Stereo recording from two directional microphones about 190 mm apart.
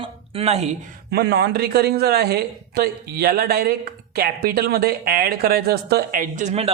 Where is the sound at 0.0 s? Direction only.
30° right (ahead or behind).